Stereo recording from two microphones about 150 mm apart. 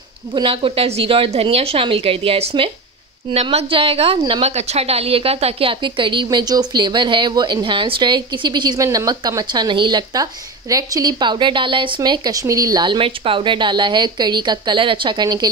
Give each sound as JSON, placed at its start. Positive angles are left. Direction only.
{"t": 0.4, "sound": "a woman's voice", "side_deg": -35}